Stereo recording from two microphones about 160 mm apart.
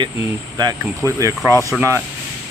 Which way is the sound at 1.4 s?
15° right (ahead or behind).